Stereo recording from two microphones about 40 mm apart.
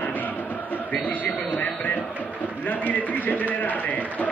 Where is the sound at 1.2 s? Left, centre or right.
Left.